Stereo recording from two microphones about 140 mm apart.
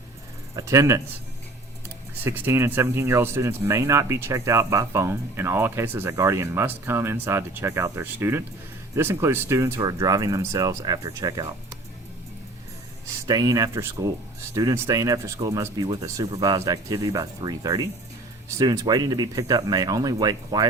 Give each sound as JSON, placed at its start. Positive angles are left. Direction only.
{"t": 0.5, "sound": "speech", "side_deg": -20}
{"t": 2.2, "sound": "speech", "side_deg": -15}
{"t": 13.2, "sound": "speech", "side_deg": -25}